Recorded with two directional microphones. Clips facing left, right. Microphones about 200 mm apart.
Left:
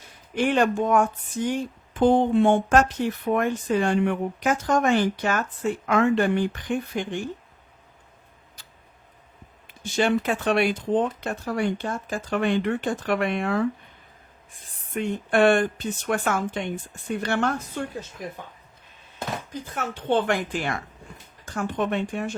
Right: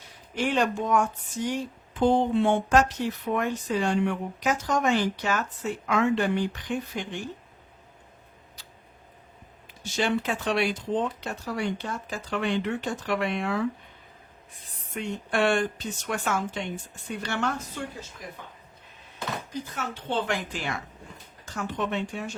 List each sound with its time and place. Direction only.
0.3 s speech: 55° left (ahead or behind)
9.9 s speech: 55° left (ahead or behind)
14.9 s speech: 55° left (ahead or behind)
19.7 s speech: 55° left (ahead or behind)